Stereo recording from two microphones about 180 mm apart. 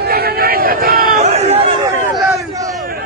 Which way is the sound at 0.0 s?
60° right (ahead or behind).